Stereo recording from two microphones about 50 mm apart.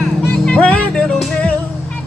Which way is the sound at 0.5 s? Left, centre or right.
Left.